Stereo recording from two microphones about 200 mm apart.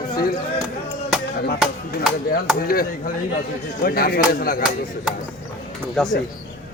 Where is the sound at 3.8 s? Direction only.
50° left (ahead or behind).